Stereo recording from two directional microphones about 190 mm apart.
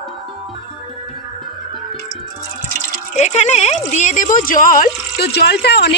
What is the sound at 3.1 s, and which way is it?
A woman's voice, 35° left (ahead or behind).